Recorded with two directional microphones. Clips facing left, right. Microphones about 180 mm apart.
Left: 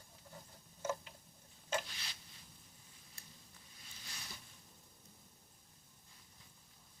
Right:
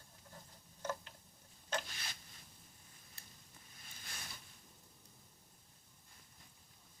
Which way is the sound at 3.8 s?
50° right (ahead or behind).